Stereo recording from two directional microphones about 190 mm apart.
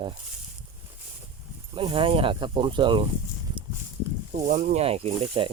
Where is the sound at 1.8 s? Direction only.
25° right (ahead or behind).